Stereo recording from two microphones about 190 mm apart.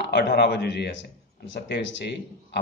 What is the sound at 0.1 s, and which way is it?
A man's voice, 60° left (ahead or behind).